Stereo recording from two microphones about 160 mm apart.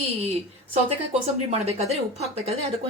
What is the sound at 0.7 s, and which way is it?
Speech, 40° right (ahead or behind).